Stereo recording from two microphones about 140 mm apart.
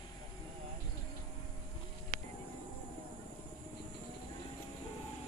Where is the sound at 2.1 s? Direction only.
90° right.